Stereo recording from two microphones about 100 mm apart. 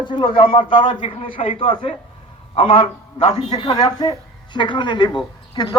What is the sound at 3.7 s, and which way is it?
Speech, 40° left (ahead or behind).